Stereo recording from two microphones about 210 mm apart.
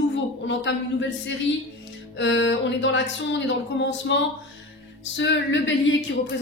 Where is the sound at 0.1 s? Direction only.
60° left (ahead or behind).